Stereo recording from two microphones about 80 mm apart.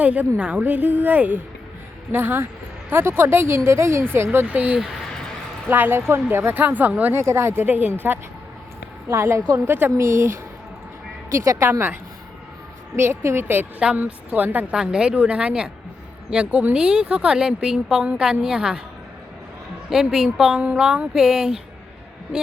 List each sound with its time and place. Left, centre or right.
0.0 s speech: centre
0.6 s speech: right
7.2 s speech: right
9.0 s a woman's voice: right
13.0 s speech: right
14.8 s speech: centre
19.9 s speech: centre